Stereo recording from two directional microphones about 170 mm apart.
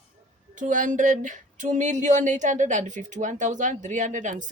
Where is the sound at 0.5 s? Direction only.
50° right (ahead or behind).